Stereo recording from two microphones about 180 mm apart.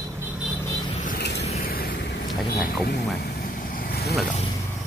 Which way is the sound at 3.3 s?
50° left (ahead or behind).